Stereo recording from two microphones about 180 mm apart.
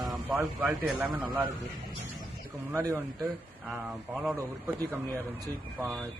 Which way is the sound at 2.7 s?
20° right (ahead or behind).